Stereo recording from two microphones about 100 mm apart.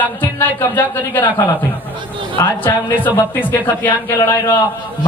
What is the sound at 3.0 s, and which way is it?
A man's voice, 20° left (ahead or behind).